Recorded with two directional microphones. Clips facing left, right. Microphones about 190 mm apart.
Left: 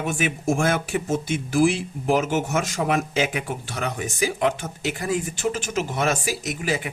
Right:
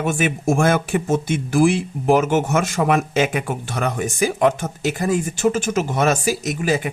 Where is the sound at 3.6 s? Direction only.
55° right (ahead or behind).